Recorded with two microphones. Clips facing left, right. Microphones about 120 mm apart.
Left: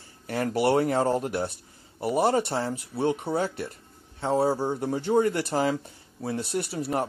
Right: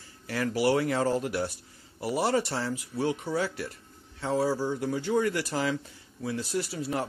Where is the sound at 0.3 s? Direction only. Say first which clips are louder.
Left 2 dB; 45° left (ahead or behind).